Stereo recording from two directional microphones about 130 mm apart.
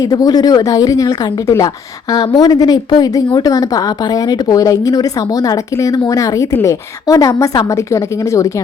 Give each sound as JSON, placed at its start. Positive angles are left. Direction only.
{"t": 0.0, "sound": "speech", "side_deg": 30}